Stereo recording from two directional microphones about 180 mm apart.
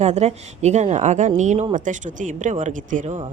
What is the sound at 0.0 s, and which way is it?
A woman's voice, 40° right (ahead or behind).